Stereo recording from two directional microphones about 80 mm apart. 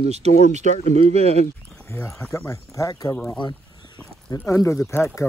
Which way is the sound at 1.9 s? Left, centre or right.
Left.